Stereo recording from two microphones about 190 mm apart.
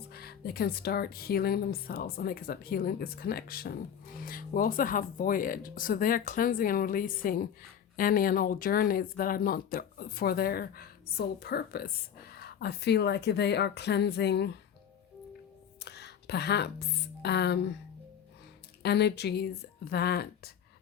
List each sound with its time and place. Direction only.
0.1 s speech: 55° left (ahead or behind)
15.8 s speech: 60° left (ahead or behind)
18.8 s speech: 60° left (ahead or behind)